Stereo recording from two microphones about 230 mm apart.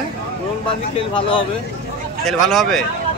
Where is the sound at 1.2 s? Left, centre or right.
Left.